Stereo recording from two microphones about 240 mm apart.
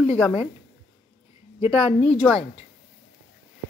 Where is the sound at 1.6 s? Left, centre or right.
Left.